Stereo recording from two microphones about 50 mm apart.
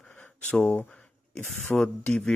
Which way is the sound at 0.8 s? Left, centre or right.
Left.